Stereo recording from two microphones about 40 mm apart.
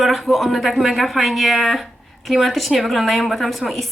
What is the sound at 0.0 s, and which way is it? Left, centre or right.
A woman's voice, centre.